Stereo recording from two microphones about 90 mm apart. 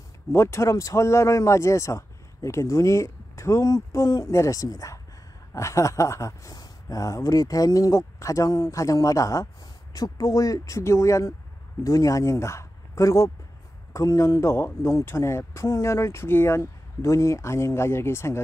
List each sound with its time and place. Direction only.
0.3 s speech: 30° left (ahead or behind)